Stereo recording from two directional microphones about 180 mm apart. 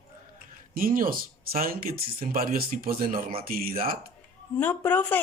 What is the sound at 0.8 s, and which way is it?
Speech, 50° right (ahead or behind).